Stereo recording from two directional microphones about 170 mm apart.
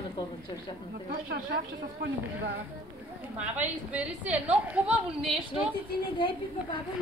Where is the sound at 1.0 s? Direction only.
65° right (ahead or behind).